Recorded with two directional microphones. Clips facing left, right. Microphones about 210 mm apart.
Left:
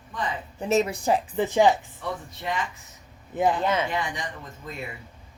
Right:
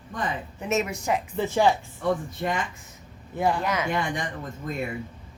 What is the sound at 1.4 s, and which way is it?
Speech, 15° left (ahead or behind).